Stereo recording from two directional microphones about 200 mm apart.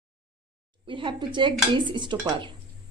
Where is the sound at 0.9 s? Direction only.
25° right (ahead or behind).